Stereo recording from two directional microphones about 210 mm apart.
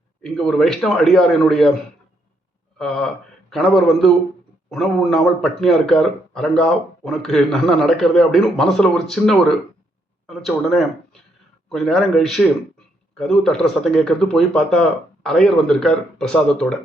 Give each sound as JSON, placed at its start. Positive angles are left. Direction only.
{"t": 0.2, "sound": "a man's voice", "side_deg": 5}
{"t": 2.7, "sound": "a man's voice", "side_deg": 0}